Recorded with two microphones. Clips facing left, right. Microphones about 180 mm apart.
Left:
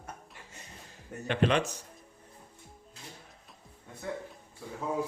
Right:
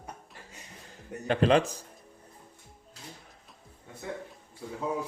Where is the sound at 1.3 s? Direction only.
35° right (ahead or behind).